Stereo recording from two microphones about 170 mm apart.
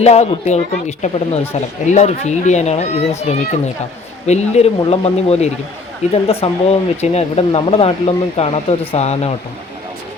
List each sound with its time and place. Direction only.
0.0 s speech: 40° left (ahead or behind)